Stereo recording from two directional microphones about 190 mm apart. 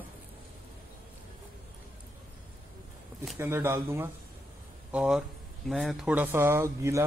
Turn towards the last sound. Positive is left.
turn(degrees=-15)  # may be behind; listen again after turning